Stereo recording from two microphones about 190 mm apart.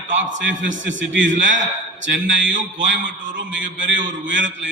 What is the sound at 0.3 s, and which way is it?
Speech, 75° right (ahead or behind).